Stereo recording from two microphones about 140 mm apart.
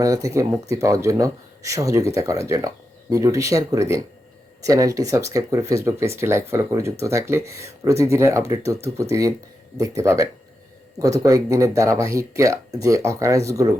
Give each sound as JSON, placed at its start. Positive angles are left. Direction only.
{"t": 0.0, "sound": "speech", "side_deg": -25}